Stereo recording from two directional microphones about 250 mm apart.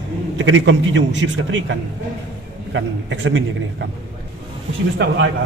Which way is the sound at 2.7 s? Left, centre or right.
Right.